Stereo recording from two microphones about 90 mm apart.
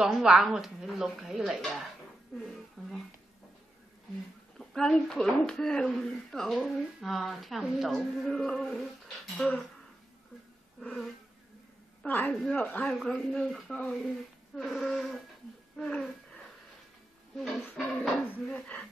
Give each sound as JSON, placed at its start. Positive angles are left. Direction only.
{"t": 0.0, "sound": "speech", "side_deg": -5}
{"t": 2.3, "sound": "a sound", "side_deg": 5}
{"t": 4.6, "sound": "speech", "side_deg": 5}
{"t": 12.1, "sound": "a woman's voice", "side_deg": 20}
{"t": 12.9, "sound": "speech", "side_deg": 5}
{"t": 15.7, "sound": "a sound", "side_deg": 5}
{"t": 17.4, "sound": "speech", "side_deg": 0}